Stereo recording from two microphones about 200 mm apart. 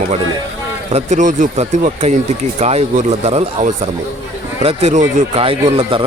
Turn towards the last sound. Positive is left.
turn(degrees=-25)  # may be behind; listen again after turning